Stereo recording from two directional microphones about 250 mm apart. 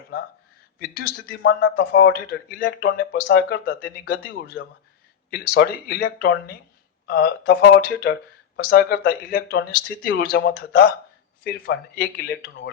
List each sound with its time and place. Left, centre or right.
0.9 s a man's voice: left